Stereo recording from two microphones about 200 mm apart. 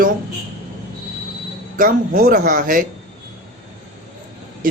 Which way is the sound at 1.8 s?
45° right (ahead or behind).